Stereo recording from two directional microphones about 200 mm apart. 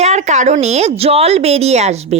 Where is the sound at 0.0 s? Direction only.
35° right (ahead or behind).